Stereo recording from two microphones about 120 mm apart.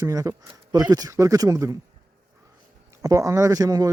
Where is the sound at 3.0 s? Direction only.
30° right (ahead or behind).